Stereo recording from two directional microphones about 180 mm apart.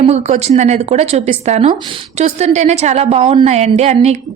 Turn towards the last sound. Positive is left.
turn(degrees=-35)  # may be behind; listen again after turning